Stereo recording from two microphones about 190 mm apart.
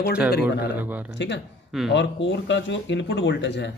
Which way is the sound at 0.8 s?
10° right (ahead or behind).